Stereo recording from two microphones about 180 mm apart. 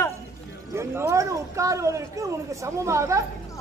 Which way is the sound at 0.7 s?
15° right (ahead or behind).